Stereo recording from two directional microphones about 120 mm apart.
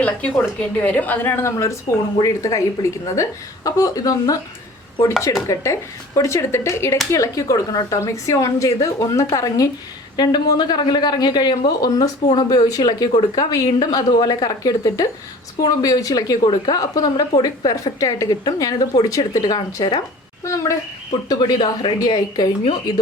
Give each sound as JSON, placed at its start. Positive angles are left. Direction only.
{"t": 0.0, "sound": "a woman's voice", "side_deg": 10}